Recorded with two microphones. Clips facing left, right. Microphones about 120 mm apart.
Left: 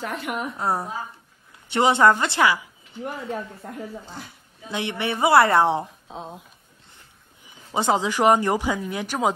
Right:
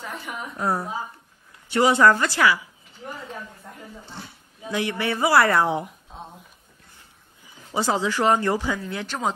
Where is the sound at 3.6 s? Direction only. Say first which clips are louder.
Left 7 dB; 60° left (ahead or behind).